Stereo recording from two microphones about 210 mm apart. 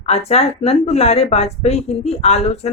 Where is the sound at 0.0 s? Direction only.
30° left (ahead or behind).